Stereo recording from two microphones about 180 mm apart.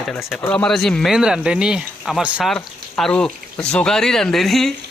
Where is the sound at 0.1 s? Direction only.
Centre (ahead or behind).